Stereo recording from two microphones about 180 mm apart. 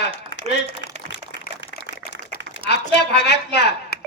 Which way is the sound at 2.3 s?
70° left (ahead or behind).